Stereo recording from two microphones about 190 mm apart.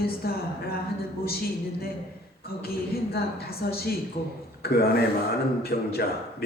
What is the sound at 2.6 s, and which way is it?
A woman's voice, 55° left (ahead or behind).